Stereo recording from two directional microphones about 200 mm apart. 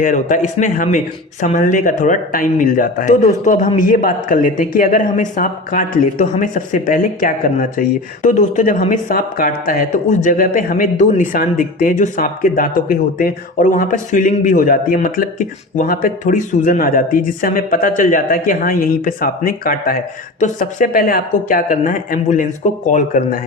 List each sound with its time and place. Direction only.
0.0 s speech: 40° left (ahead or behind)